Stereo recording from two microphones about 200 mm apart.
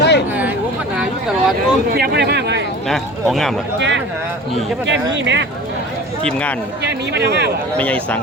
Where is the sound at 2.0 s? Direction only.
55° right (ahead or behind).